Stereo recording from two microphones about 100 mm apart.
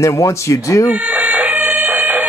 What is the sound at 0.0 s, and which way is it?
Speech, 30° left (ahead or behind).